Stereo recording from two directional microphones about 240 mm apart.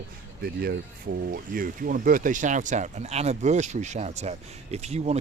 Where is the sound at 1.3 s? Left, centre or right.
Right.